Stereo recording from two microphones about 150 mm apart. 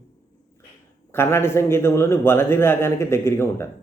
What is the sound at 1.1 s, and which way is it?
A man's voice, 15° left (ahead or behind).